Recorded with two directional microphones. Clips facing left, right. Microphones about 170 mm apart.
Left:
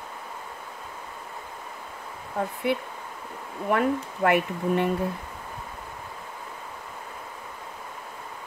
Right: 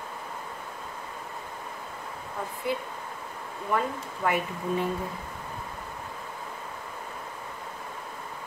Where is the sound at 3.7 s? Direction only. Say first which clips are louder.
Left 5 dB; 65° left (ahead or behind).